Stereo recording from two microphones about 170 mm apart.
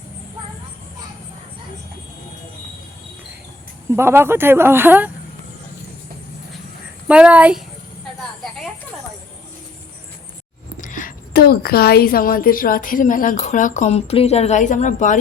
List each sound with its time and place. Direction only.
3.8 s speech: 15° right (ahead or behind)
7.1 s speech: 5° right (ahead or behind)
10.8 s a woman's voice: 50° left (ahead or behind)